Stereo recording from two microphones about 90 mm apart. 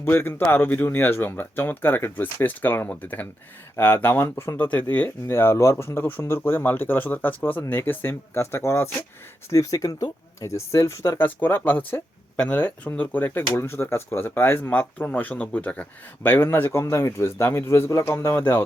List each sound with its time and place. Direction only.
0.0 s speech: 25° left (ahead or behind)
11.2 s speech: 20° left (ahead or behind)